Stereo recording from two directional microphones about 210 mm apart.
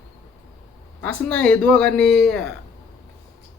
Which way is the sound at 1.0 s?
5° left (ahead or behind).